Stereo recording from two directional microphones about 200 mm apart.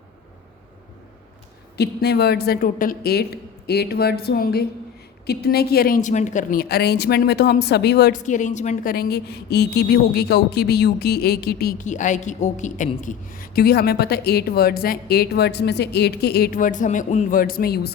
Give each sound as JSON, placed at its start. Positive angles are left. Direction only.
{"t": 1.8, "sound": "a woman's voice", "side_deg": 55}
{"t": 8.1, "sound": "a woman's voice", "side_deg": 40}